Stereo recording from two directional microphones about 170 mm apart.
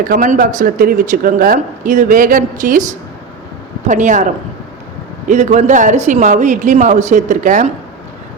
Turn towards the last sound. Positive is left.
turn(degrees=-45)  # may be behind; listen again after turning